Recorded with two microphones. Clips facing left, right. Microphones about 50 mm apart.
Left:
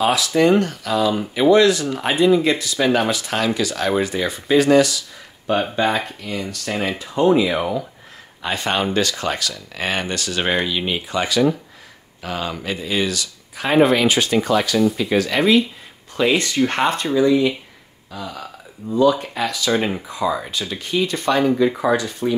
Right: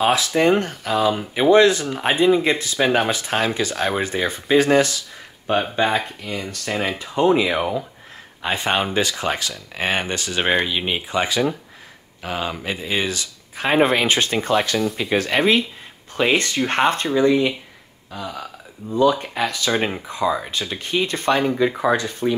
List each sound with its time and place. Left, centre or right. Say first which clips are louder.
0.0 s speech: left 1 dB; right
8.4 s speech: even; right
18.9 s speech: left 1 dB; right